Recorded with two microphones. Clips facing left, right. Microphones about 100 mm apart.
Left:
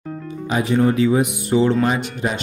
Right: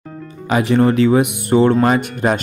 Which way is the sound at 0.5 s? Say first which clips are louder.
Right 4 dB; 75° right (ahead or behind).